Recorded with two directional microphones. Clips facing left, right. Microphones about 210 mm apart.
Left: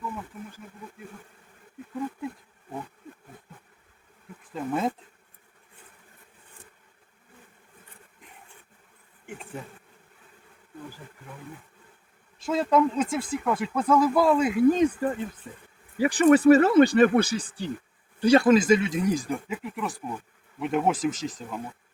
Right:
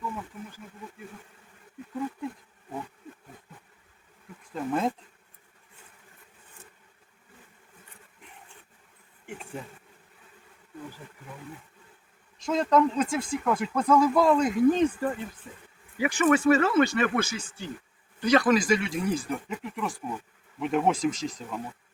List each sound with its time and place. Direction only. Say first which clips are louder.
0.0 s wild animals: even; centre (ahead or behind)
4.5 s speech: even; centre (ahead or behind)
9.2 s insect: even; centre (ahead or behind)
12.5 s speech: even; 5° left (ahead or behind)
16.0 s speech: left 5 dB; 35° left (ahead or behind); by 21.6 s centre (ahead or behind)